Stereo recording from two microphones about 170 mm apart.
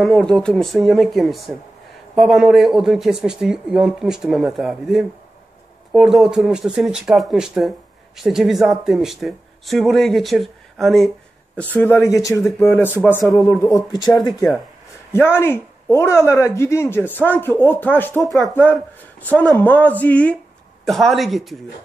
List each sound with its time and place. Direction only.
0.0 s speech: 5° left (ahead or behind)
11.7 s speech: 10° left (ahead or behind)
12.4 s speech: 5° left (ahead or behind)
13.2 s speech: centre (ahead or behind)
13.6 s speech: 20° left (ahead or behind)
15.1 s speech: 15° left (ahead or behind)
18.2 s speech: centre (ahead or behind)
18.5 s speech: 10° left (ahead or behind)